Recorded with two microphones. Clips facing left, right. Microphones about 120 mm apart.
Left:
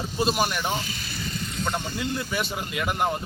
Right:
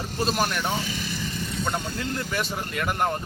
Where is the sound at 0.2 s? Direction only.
10° left (ahead or behind).